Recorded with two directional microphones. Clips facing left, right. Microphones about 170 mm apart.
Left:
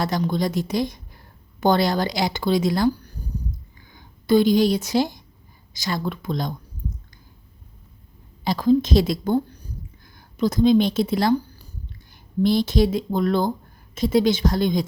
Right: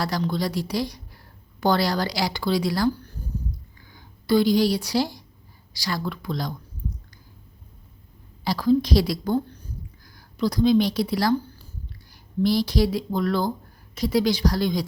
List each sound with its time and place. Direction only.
0.2 s a woman's voice: 20° left (ahead or behind)
8.4 s a woman's voice: 20° left (ahead or behind)